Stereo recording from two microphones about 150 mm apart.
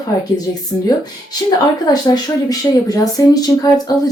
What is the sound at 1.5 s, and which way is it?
Speech, 25° left (ahead or behind).